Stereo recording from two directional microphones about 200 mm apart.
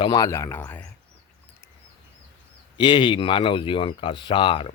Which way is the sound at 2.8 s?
25° left (ahead or behind).